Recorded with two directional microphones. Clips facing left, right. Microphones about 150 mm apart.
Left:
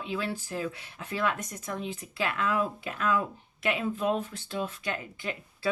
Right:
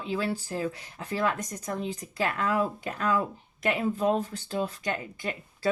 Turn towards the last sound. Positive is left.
turn(degrees=-40)  # may be behind; listen again after turning